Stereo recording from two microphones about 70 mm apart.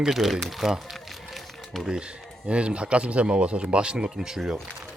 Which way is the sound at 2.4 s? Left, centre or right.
Centre.